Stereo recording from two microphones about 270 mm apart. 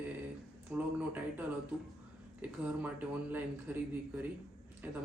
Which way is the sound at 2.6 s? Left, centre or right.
Centre.